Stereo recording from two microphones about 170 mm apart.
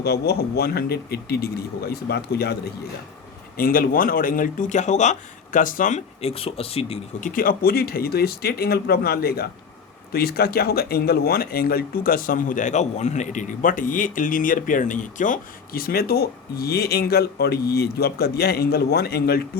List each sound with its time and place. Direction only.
0.0 s speech: 70° left (ahead or behind)
3.6 s speech: 60° left (ahead or behind); by 7.3 s 35° left (ahead or behind)
7.3 s speech: 55° left (ahead or behind)